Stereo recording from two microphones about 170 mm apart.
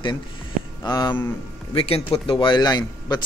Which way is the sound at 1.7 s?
35° left (ahead or behind).